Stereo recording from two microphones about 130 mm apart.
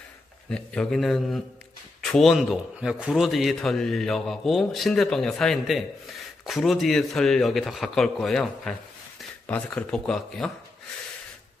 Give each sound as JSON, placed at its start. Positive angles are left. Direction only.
{"t": 0.5, "sound": "a man's voice", "side_deg": 5}